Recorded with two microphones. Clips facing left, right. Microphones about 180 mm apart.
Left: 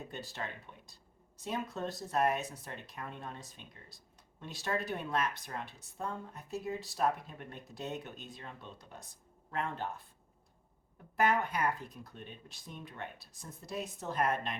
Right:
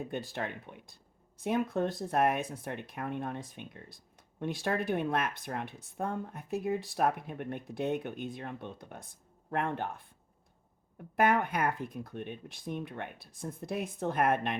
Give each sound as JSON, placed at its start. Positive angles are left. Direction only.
{"t": 0.0, "sound": "speech", "side_deg": -55}
{"t": 11.2, "sound": "speech", "side_deg": -55}